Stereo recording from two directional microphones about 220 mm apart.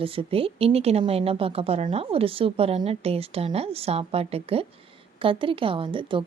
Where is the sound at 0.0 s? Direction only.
25° right (ahead or behind).